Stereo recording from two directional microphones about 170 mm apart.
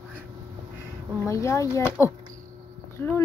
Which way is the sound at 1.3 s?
20° left (ahead or behind).